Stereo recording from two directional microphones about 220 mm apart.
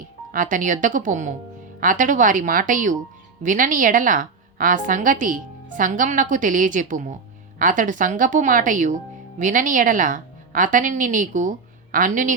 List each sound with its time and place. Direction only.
0.3 s a woman's voice: 35° right (ahead or behind)